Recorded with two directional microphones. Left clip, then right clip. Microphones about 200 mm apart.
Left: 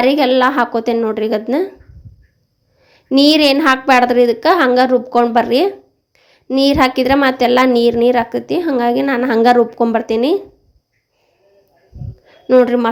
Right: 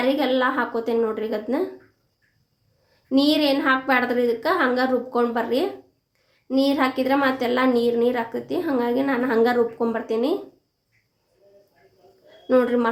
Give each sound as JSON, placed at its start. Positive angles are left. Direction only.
{"t": 0.0, "sound": "a woman's voice", "side_deg": 40}
{"t": 3.1, "sound": "a woman's voice", "side_deg": 40}
{"t": 12.5, "sound": "a woman's voice", "side_deg": 35}